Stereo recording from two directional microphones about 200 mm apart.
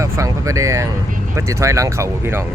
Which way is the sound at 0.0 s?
15° right (ahead or behind).